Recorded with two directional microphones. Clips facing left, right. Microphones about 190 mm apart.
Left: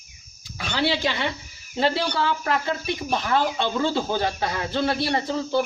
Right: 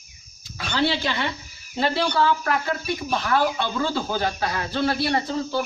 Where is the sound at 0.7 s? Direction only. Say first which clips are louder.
Even; 15° left (ahead or behind).